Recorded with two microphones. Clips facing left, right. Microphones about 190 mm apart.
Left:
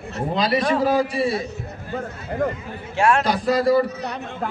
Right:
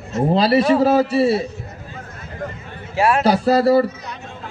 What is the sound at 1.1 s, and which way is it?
Speech, 30° right (ahead or behind).